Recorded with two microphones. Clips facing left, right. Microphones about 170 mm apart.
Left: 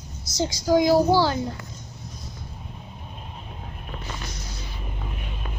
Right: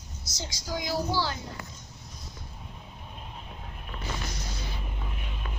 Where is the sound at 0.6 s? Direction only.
80° left.